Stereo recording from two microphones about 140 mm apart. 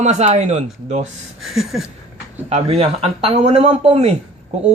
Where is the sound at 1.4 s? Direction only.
Centre (ahead or behind).